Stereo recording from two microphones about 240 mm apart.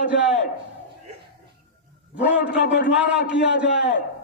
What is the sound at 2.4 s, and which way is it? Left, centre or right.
Speech, left.